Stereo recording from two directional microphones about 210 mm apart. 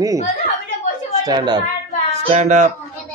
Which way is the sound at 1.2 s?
20° right (ahead or behind).